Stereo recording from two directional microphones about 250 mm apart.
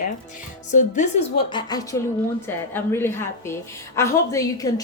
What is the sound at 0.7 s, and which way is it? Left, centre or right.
Speech, left.